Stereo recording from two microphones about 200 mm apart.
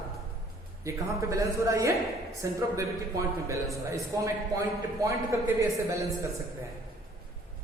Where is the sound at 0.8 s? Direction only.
15° right (ahead or behind).